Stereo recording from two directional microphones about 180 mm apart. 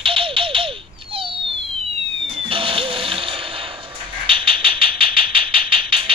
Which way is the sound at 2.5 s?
30° right (ahead or behind).